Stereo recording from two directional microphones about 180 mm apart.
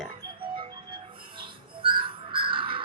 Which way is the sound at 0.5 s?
30° right (ahead or behind).